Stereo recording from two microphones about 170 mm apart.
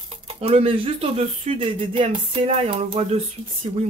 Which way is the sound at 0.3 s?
35° right (ahead or behind).